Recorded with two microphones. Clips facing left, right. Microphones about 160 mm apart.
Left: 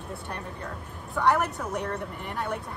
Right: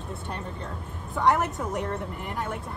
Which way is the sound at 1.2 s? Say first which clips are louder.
Right 1 dB; 20° right (ahead or behind).